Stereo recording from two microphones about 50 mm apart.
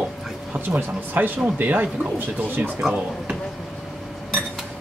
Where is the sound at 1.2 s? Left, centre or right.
Right.